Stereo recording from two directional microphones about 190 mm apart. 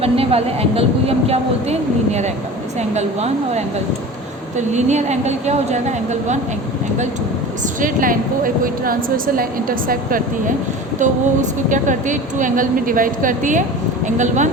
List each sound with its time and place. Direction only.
0.0 s a woman's voice: 30° right (ahead or behind)
2.7 s a woman's voice: 35° right (ahead or behind)
7.8 s a woman's voice: 45° right (ahead or behind)